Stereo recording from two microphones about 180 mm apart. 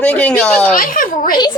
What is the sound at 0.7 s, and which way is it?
Speech, 50° left (ahead or behind).